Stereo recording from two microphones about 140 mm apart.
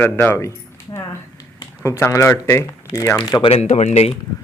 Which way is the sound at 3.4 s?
50° left (ahead or behind).